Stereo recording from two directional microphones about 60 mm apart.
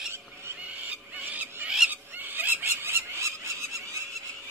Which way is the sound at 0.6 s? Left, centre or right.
Right.